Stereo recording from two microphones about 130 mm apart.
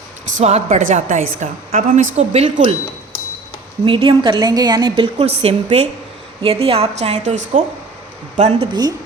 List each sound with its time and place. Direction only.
0.3 s a woman's voice: 55° right (ahead or behind)
0.8 s a woman's voice: 80° right
2.3 s a woman's voice: 55° right (ahead or behind)
3.8 s a woman's voice: 40° right (ahead or behind)
5.2 s a woman's voice: 50° right (ahead or behind)
8.4 s a woman's voice: 50° right (ahead or behind)